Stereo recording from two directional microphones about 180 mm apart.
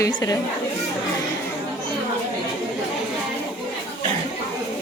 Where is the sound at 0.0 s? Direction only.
20° left (ahead or behind).